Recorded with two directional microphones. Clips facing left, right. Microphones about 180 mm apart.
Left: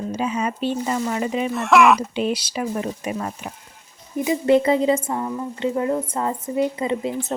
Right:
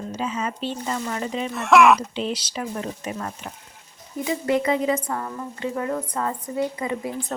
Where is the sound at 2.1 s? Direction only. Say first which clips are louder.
Left 4 dB; 10° left (ahead or behind).